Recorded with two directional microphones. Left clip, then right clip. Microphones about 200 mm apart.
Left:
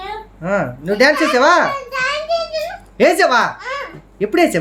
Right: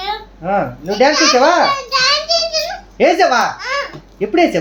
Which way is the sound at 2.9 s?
50° left (ahead or behind).